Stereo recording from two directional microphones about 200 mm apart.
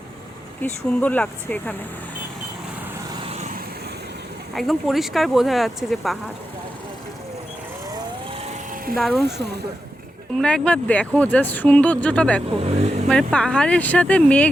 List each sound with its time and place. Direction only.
0.6 s speech: 5° left (ahead or behind)
3.2 s vehicle: 30° right (ahead or behind)
4.5 s speech: centre (ahead or behind)
9.0 s speech: centre (ahead or behind)
10.3 s speech: 5° left (ahead or behind)
12.5 s speech: 30° right (ahead or behind)
13.1 s speech: 5° left (ahead or behind)